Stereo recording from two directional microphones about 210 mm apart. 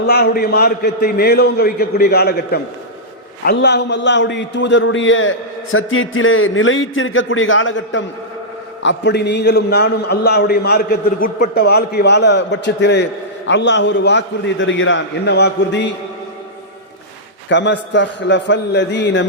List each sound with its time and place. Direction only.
0.0 s a man's voice: 50° left (ahead or behind)
17.5 s a man's voice: 55° left (ahead or behind)